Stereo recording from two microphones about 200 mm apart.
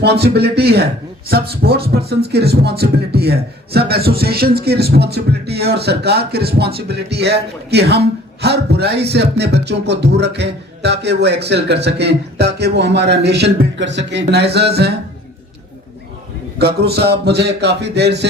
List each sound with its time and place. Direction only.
0.0 s speech: 55° right (ahead or behind)
16.6 s speech: 55° right (ahead or behind)